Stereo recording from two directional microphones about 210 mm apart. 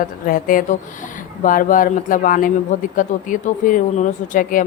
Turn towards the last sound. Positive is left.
turn(degrees=40)  # may be behind; listen again after turning